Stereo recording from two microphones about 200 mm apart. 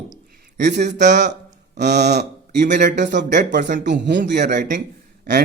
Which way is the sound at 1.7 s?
55° right (ahead or behind).